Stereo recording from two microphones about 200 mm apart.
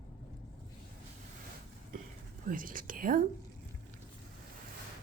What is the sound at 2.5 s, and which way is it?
Speech, 45° right (ahead or behind).